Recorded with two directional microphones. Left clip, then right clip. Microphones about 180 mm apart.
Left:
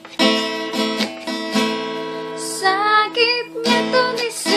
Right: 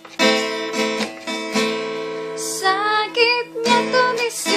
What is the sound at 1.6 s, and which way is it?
Music, 30° left (ahead or behind).